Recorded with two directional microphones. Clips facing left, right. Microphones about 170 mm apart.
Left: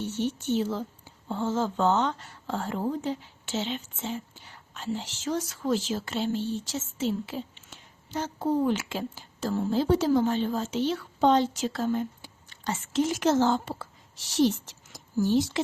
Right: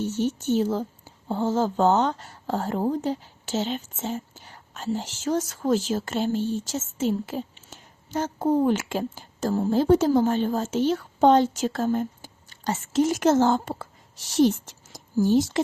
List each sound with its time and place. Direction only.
0.0 s speech: 40° right (ahead or behind)